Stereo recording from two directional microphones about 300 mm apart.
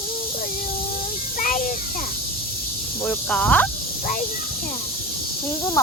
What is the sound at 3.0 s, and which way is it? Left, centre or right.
Speech, centre.